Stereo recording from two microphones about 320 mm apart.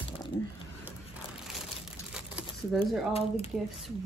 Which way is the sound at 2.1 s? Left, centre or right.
Centre.